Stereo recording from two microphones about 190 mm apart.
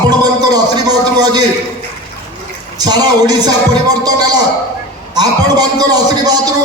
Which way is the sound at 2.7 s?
20° right (ahead or behind).